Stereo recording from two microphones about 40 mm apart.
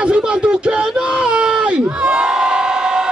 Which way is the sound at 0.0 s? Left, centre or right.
Right.